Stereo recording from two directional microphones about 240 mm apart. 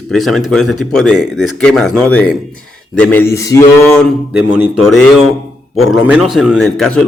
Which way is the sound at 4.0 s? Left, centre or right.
Centre.